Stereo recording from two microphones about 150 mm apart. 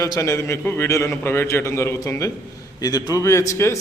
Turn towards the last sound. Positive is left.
turn(degrees=20)  # may be behind; listen again after turning